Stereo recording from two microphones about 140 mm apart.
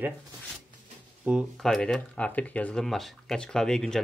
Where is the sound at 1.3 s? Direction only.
10° right (ahead or behind).